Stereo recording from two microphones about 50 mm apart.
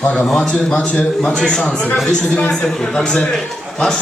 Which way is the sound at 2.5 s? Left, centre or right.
Centre.